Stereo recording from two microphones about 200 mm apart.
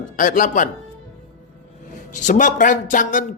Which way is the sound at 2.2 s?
40° left (ahead or behind).